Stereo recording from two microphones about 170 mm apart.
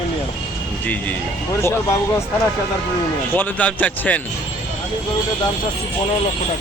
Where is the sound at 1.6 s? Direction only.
15° left (ahead or behind).